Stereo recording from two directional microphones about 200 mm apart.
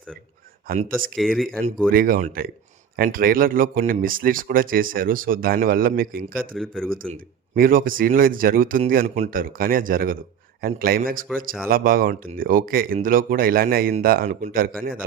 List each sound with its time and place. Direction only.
0.7 s speech: 45° right (ahead or behind)
1.1 s speech: centre (ahead or behind)
1.9 s speech: 45° right (ahead or behind)
6.6 s speech: centre (ahead or behind)
6.9 s speech: 45° right (ahead or behind)